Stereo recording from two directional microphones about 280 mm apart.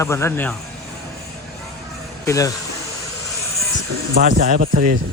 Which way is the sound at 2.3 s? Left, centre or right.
Centre.